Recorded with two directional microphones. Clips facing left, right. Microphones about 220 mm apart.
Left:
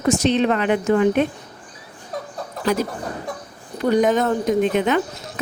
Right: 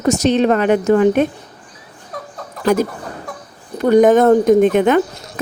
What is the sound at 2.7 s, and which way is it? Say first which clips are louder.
A woman's voice: right 6 dB; 50° right (ahead or behind).